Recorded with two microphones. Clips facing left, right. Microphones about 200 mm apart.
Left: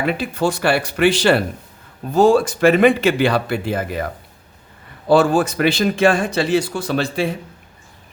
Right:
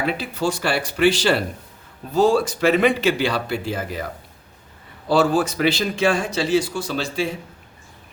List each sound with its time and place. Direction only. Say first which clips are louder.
0.2 s speech: left 4 dB; 55° left (ahead or behind)
5.0 s speech: left 4 dB; 50° left (ahead or behind)